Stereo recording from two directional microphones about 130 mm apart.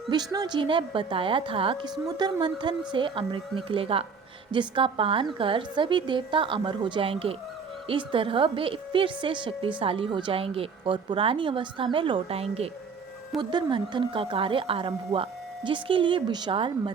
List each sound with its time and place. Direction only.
0.1 s a woman's voice: 30° right (ahead or behind); by 12.7 s 50° right (ahead or behind)
13.4 s a woman's voice: 35° right (ahead or behind)